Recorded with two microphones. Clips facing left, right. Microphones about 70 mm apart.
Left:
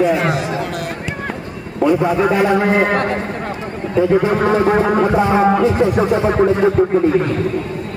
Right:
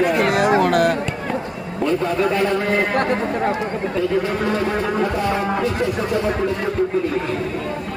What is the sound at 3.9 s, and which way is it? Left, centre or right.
A man's voice, left.